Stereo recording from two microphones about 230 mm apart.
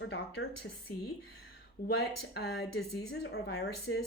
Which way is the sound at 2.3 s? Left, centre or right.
Left.